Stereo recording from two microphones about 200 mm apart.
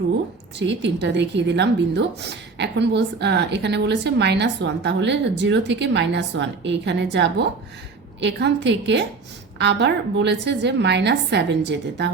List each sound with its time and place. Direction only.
0.6 s a woman's voice: 60° right (ahead or behind)